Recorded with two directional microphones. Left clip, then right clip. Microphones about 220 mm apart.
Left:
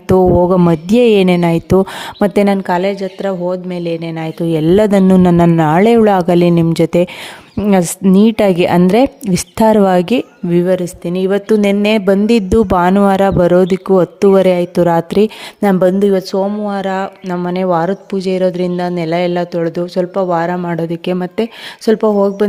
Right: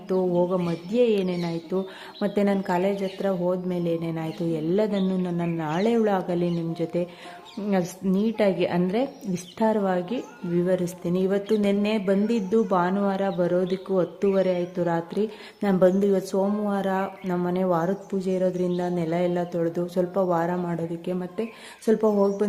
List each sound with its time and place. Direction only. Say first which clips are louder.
0.1 s a woman's voice: left 14 dB; 50° left (ahead or behind)